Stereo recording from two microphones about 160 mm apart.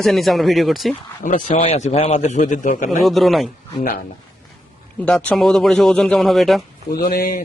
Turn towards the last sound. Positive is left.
turn(degrees=65)  # may be behind; listen again after turning